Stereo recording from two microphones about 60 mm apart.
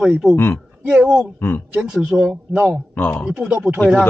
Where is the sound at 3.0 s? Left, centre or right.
Left.